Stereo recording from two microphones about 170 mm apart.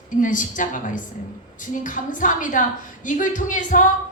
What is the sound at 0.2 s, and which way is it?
A woman's voice, 50° left (ahead or behind).